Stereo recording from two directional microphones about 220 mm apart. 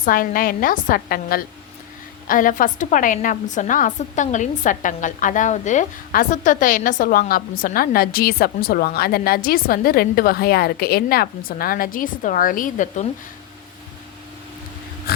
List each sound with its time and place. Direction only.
0.0 s a woman's voice: 40° left (ahead or behind)